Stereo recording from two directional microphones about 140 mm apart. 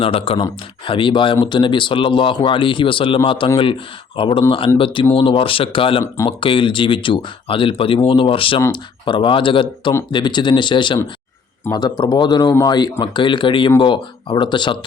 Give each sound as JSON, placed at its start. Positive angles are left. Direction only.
{"t": 0.0, "sound": "speech", "side_deg": 40}